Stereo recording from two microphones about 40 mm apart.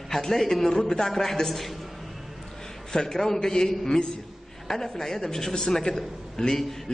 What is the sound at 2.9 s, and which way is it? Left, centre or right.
A man's voice, centre.